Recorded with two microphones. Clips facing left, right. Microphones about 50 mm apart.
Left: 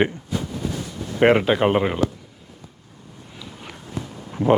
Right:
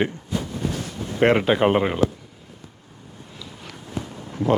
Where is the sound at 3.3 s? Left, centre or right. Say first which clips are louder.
Left 2 dB; centre.